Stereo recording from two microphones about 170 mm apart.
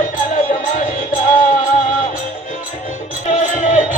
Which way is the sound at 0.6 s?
50° left (ahead or behind).